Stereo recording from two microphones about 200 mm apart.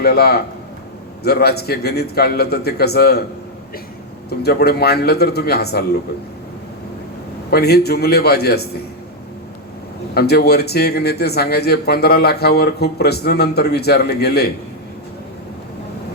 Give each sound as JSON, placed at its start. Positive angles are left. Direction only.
{"t": 0.0, "sound": "speech", "side_deg": 50}
{"t": 4.3, "sound": "speech", "side_deg": 55}
{"t": 7.5, "sound": "speech", "side_deg": 55}
{"t": 10.2, "sound": "speech", "side_deg": 55}